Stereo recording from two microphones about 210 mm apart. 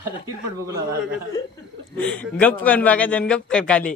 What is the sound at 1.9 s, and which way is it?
A man's voice, 5° left (ahead or behind).